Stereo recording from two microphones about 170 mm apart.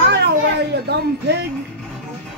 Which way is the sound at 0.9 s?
75° right (ahead or behind).